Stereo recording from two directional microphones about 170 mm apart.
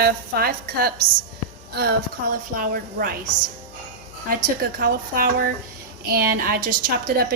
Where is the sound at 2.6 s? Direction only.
55° right (ahead or behind).